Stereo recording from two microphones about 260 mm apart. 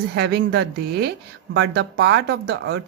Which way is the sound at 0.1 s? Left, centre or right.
Right.